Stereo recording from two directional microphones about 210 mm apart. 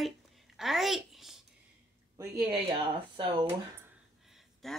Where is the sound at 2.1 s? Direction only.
20° right (ahead or behind).